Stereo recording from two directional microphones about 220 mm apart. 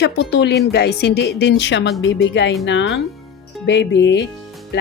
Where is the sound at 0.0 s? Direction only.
50° left (ahead or behind).